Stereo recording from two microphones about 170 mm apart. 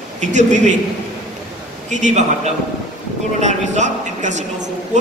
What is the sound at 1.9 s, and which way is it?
Speech, 45° right (ahead or behind).